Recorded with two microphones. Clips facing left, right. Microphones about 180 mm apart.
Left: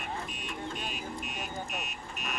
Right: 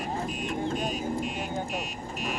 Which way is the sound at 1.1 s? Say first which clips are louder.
Right 7 dB; 30° right (ahead or behind).